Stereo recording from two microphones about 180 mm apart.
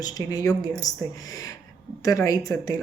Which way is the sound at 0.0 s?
20° left (ahead or behind).